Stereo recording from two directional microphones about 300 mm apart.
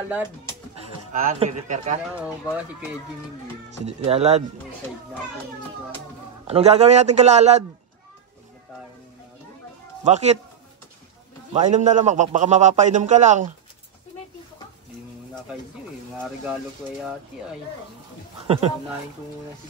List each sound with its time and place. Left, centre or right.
1.1 s a man's voice: right
2.1 s speech: centre
3.8 s a man's voice: right
6.4 s a man's voice: right
10.0 s a man's voice: right
11.5 s a man's voice: right
16.2 s speech: centre